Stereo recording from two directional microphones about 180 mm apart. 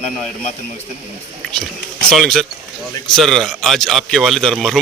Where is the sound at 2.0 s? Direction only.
5° left (ahead or behind).